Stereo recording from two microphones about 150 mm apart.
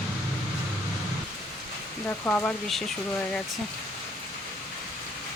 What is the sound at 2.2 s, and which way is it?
Speech, 10° left (ahead or behind).